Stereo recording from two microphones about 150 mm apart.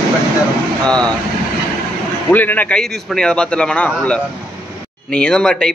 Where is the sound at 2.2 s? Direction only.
10° left (ahead or behind).